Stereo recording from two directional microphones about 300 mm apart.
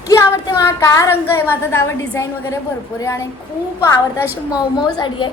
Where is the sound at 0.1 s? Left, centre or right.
Centre.